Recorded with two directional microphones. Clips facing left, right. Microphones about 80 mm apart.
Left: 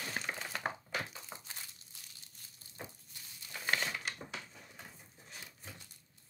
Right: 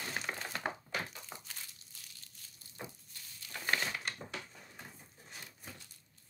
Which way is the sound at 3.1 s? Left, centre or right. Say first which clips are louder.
Even; centre.